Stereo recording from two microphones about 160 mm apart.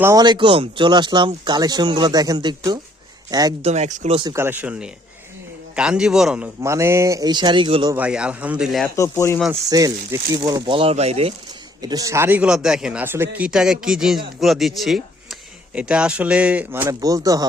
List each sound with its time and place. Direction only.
0.0 s speech: 20° right (ahead or behind)
3.6 s speech: 45° right (ahead or behind)
4.2 s speech: 20° right (ahead or behind); by 6.5 s 5° right (ahead or behind)
6.6 s speech: 20° right (ahead or behind)
7.9 s speech: 5° right (ahead or behind)
9.0 s speech: 15° left (ahead or behind)
9.5 s speech: 20° right (ahead or behind); by 11.3 s 40° right (ahead or behind)
11.8 s speech: 25° right (ahead or behind)